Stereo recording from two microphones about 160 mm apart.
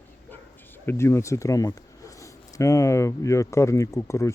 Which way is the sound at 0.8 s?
15° left (ahead or behind).